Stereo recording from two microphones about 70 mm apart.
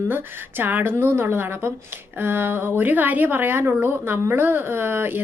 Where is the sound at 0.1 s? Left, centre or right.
Right.